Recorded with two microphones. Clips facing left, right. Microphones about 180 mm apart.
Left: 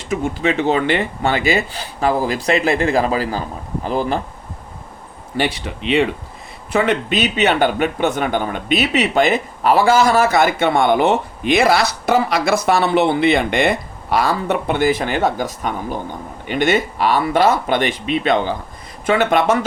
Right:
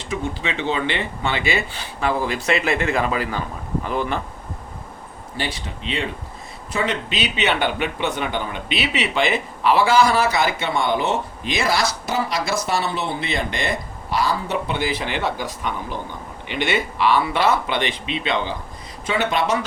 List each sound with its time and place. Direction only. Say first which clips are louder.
0.0 s speech: left 6 dB; 45° left (ahead or behind)
5.4 s speech: left 8 dB; 70° left (ahead or behind)
6.7 s speech: left 7 dB; 50° left (ahead or behind)